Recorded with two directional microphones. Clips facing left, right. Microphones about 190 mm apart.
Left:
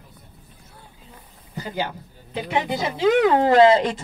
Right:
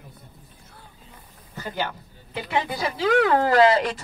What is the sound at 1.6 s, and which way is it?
A woman's voice, 15° left (ahead or behind).